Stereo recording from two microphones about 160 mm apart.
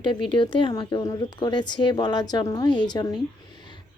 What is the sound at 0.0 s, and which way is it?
Speech, 30° left (ahead or behind).